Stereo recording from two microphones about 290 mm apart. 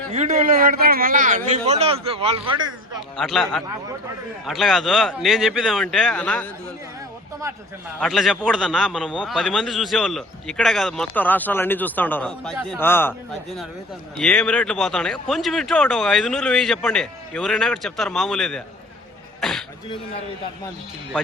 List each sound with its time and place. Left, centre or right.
0.1 s a man's voice: right
3.2 s a man's voice: centre
7.9 s a man's voice: centre
14.2 s a man's voice: centre
19.4 s a sound: centre